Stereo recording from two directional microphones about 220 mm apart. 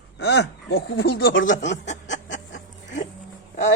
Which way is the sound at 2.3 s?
55° left (ahead or behind).